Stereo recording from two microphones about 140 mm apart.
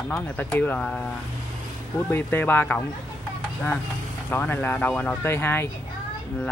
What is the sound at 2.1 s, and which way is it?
Speech, 15° left (ahead or behind).